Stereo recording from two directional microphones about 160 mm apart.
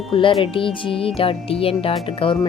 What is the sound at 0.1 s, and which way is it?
Speech, 35° left (ahead or behind).